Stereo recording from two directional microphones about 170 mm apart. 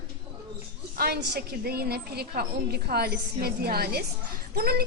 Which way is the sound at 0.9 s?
65° right (ahead or behind).